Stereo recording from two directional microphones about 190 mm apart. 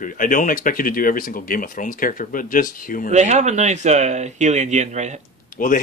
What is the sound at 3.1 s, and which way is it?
Speech, 35° right (ahead or behind).